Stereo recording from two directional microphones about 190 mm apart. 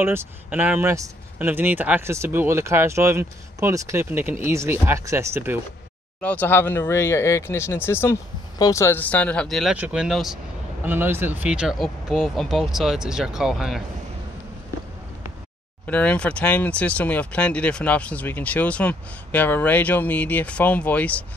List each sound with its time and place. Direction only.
0.0 s speech: 10° right (ahead or behind)
6.2 s speech: 10° left (ahead or behind)
10.9 s speech: 10° right (ahead or behind)
15.9 s speech: 5° left (ahead or behind)